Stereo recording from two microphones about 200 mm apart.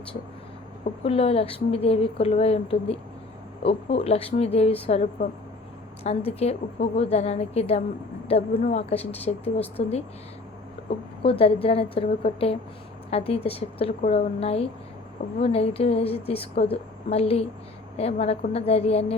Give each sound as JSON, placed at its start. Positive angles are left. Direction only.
{"t": 1.0, "sound": "a woman's voice", "side_deg": 30}